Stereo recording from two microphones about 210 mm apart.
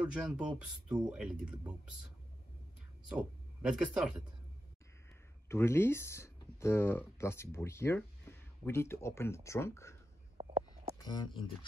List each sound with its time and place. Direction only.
0.0 s speech: 5° right (ahead or behind)
3.1 s speech: 5° right (ahead or behind)
5.5 s speech: 10° left (ahead or behind)
10.4 s a sound: 20° right (ahead or behind)
11.0 s speech: 20° left (ahead or behind)